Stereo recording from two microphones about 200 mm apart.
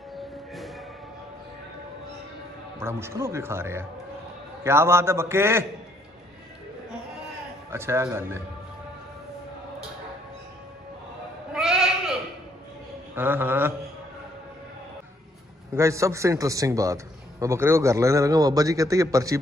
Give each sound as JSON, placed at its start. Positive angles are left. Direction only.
{"t": 0.6, "sound": "a sound", "side_deg": 0}
{"t": 2.8, "sound": "a man's voice", "side_deg": -15}
{"t": 7.7, "sound": "a man's voice", "side_deg": -10}
{"t": 11.5, "sound": "bleat", "side_deg": 0}
{"t": 13.1, "sound": "a man's voice", "side_deg": -10}
{"t": 15.7, "sound": "a man's voice", "side_deg": -15}